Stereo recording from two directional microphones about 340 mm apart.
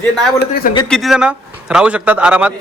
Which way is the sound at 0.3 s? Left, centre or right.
Left.